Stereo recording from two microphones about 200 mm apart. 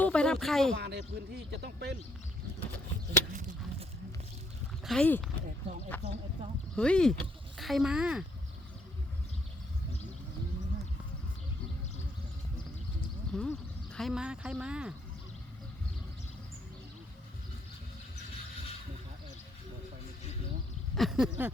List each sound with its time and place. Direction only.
0.0 s speech: 5° left (ahead or behind)
0.8 s speech: 55° right (ahead or behind)
4.9 s a sound: 5° left (ahead or behind)
5.9 s speech: 10° left (ahead or behind)
13.3 s speech: 5° left (ahead or behind)
20.9 s a sound: centre (ahead or behind)